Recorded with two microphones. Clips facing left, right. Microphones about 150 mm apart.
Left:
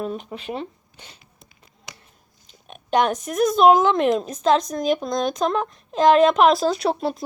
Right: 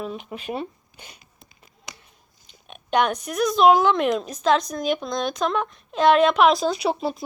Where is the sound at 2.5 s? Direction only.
35° left (ahead or behind).